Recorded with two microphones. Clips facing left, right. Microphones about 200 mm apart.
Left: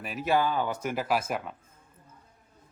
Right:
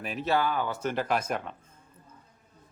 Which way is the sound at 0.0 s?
5° left (ahead or behind).